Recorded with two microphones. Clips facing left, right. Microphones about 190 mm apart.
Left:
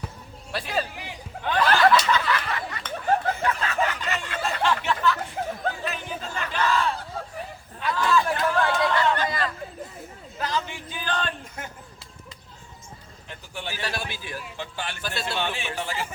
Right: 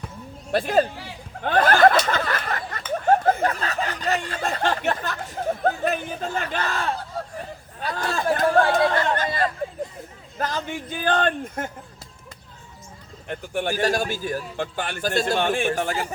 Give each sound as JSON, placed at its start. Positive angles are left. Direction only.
{"t": 0.5, "sound": "speech", "side_deg": -50}
{"t": 1.4, "sound": "snicker", "side_deg": -50}
{"t": 4.4, "sound": "a sound", "side_deg": -50}
{"t": 8.9, "sound": "chatter", "side_deg": -45}
{"t": 10.3, "sound": "speech", "side_deg": -50}
{"t": 13.2, "sound": "speech", "side_deg": -55}